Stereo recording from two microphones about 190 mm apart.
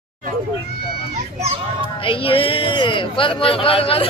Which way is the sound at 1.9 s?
30° left (ahead or behind).